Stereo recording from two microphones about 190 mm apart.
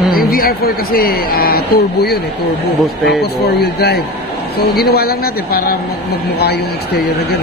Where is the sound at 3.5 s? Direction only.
55° left (ahead or behind).